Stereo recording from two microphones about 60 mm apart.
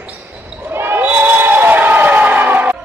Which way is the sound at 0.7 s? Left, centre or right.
Right.